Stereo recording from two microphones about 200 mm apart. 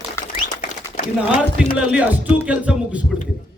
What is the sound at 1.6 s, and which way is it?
A man's voice, 5° right (ahead or behind).